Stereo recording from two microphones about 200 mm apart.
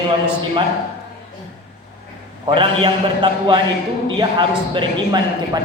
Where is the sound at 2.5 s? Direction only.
25° right (ahead or behind).